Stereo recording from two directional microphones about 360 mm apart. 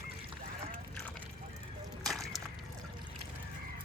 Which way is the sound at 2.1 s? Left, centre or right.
Centre.